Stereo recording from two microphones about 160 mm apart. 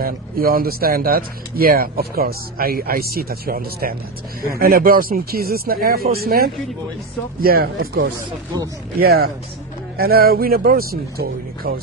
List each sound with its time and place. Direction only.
0.0 s speech: 65° right (ahead or behind)